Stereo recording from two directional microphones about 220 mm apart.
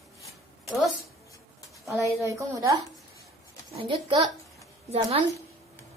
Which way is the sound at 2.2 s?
15° right (ahead or behind).